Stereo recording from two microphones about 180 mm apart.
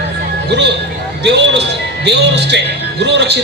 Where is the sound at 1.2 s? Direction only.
70° right (ahead or behind).